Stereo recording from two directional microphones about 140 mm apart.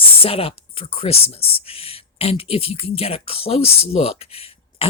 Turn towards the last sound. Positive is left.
turn(degrees=45)  # may be behind; listen again after turning